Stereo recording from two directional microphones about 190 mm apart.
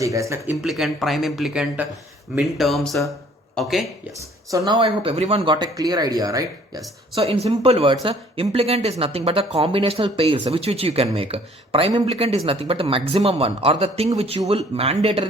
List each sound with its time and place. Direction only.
0.0 s speech: 15° right (ahead or behind)
0.6 s speech: centre (ahead or behind)
4.5 s speech: 25° right (ahead or behind)
7.2 s speech: 30° right (ahead or behind)